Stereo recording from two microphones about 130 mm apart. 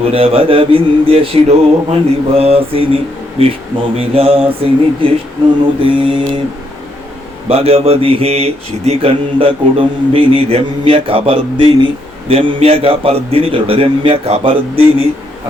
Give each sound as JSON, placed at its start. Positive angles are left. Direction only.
{"t": 0.0, "sound": "speech", "side_deg": -45}
{"t": 5.8, "sound": "mantra", "side_deg": -40}
{"t": 7.4, "sound": "speech", "side_deg": -50}